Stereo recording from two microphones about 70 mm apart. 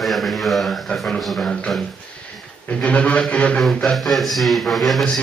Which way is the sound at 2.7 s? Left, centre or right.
Centre.